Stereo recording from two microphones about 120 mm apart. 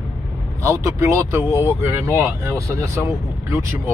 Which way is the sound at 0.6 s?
25° right (ahead or behind).